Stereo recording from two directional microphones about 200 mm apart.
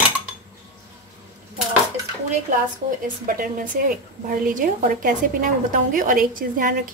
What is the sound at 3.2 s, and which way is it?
A woman's voice, 45° right (ahead or behind).